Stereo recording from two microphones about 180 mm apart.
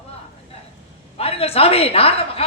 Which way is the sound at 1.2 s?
35° left (ahead or behind).